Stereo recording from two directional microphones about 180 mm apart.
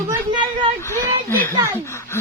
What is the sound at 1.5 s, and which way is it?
Speech, 15° right (ahead or behind).